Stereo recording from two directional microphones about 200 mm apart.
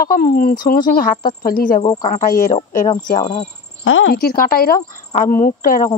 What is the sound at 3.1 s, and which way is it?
Speech, 25° left (ahead or behind).